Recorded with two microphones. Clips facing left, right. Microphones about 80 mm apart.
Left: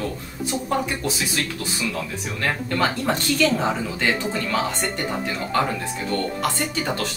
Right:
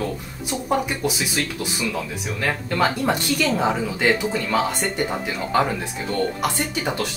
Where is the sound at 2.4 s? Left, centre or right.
Centre.